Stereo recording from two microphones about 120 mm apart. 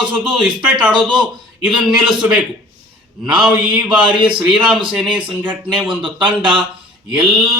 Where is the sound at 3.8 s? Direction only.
40° right (ahead or behind).